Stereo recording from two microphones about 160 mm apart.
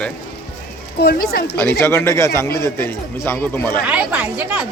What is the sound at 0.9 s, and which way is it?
Speech, 80° left.